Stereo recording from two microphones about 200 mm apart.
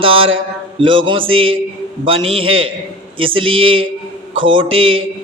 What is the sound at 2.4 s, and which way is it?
Speech, 90° right.